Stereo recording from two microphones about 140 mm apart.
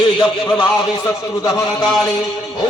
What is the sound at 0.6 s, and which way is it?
A man's voice, 25° left (ahead or behind).